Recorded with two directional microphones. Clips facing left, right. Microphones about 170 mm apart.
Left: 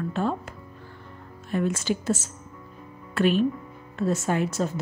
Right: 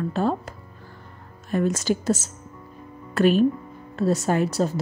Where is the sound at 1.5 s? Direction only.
40° right (ahead or behind).